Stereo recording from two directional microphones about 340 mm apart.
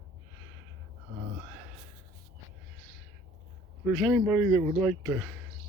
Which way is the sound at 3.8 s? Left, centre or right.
Centre.